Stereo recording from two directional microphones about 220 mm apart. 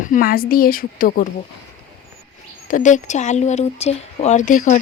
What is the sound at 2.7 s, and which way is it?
Speech, 35° left (ahead or behind).